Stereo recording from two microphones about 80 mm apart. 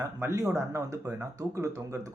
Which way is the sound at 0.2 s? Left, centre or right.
Right.